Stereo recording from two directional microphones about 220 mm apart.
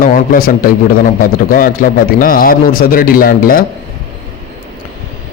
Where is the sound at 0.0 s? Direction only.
40° left (ahead or behind).